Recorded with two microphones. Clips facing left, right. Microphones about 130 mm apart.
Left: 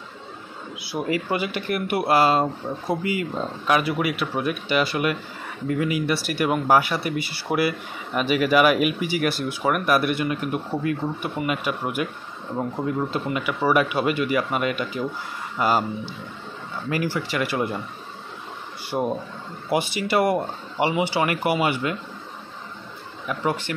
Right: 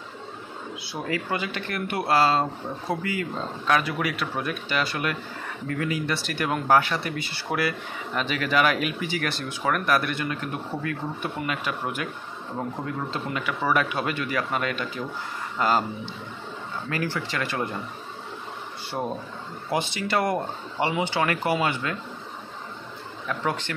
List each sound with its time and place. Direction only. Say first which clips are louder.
0.7 s speech: left 5 dB; 15° left (ahead or behind)
16.9 s speech: left 4 dB; 10° left (ahead or behind)
18.9 s speech: left 5 dB; 20° left (ahead or behind)
23.2 s speech: left 3 dB; 10° left (ahead or behind)